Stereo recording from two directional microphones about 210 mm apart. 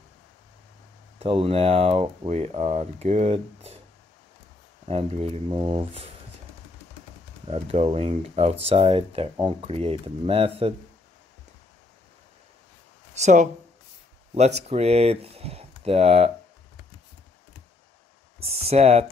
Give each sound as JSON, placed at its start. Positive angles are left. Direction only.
{"t": 1.2, "sound": "speech", "side_deg": -25}
{"t": 4.8, "sound": "speech", "side_deg": -30}
{"t": 7.4, "sound": "speech", "side_deg": -30}
{"t": 13.1, "sound": "speech", "side_deg": -35}
{"t": 18.7, "sound": "speech", "side_deg": -30}